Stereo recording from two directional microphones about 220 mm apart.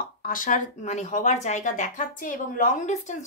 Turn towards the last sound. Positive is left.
turn(degrees=35)  # may be behind; listen again after turning